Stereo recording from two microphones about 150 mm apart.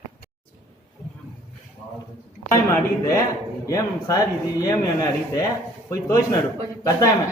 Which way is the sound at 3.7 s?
20° left (ahead or behind).